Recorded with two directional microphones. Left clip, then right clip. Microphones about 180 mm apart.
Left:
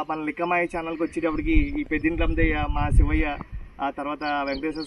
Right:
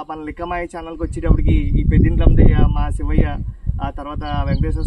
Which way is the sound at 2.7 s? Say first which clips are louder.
Right 2 dB; 10° right (ahead or behind).